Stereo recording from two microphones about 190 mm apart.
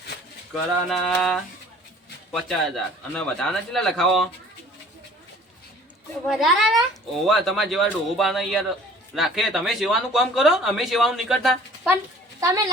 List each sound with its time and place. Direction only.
0.9 s speech: centre (ahead or behind)
6.2 s speech: centre (ahead or behind)
12.4 s a child's voice: 15° right (ahead or behind)